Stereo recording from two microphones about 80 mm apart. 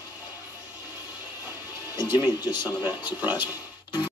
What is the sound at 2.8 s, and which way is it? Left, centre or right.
Speech, right.